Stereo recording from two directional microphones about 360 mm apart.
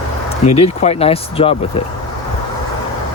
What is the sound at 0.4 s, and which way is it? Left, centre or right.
Speech, centre.